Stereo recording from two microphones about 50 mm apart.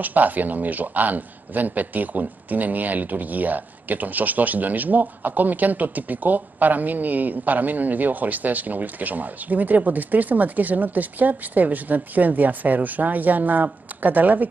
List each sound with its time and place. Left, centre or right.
0.0 s a man's voice: right